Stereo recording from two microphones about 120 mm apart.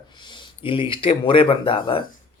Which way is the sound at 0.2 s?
45° left (ahead or behind).